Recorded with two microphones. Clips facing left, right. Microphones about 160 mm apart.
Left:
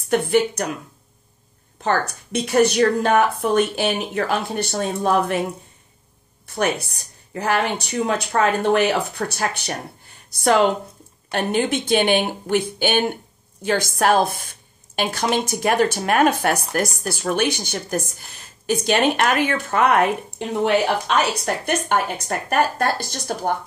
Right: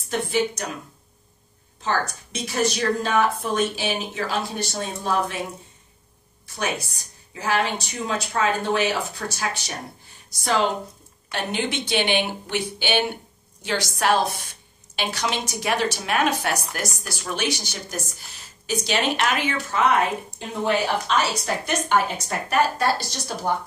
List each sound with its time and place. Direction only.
0.1 s a woman's voice: 60° left (ahead or behind)
1.8 s a woman's voice: 60° left (ahead or behind)
6.4 s a woman's voice: 60° left (ahead or behind)
11.3 s speech: 50° left (ahead or behind)